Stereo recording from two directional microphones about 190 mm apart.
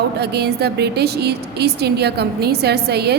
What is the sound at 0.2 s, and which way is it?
A woman's voice, 60° right (ahead or behind).